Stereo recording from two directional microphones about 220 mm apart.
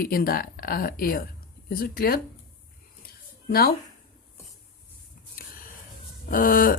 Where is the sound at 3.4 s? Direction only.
45° left (ahead or behind).